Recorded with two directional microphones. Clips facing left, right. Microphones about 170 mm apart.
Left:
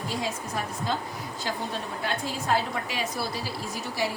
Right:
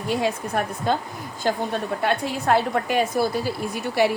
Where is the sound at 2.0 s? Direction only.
65° right (ahead or behind).